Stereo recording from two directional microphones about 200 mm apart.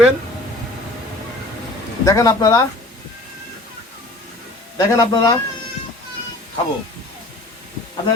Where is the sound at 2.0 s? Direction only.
15° left (ahead or behind).